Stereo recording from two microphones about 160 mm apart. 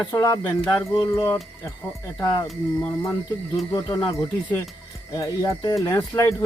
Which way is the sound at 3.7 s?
20° left (ahead or behind).